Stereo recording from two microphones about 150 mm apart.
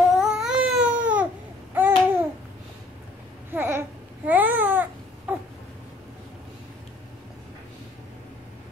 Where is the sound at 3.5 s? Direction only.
15° right (ahead or behind).